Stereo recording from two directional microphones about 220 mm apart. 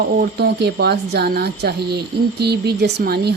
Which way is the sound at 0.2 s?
50° right (ahead or behind).